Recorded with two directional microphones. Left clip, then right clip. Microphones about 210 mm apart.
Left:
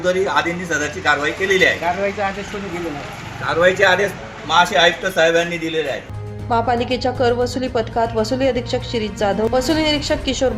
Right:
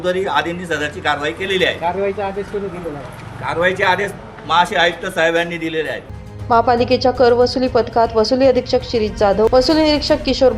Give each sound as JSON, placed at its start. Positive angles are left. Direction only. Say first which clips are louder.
{"t": 0.0, "sound": "a woman's voice", "louder": "even", "side_deg": -10}
{"t": 1.5, "sound": "speech", "louder": "left 2 dB", "side_deg": -25}
{"t": 3.6, "sound": "a man's voice", "louder": "left 2 dB", "side_deg": 0}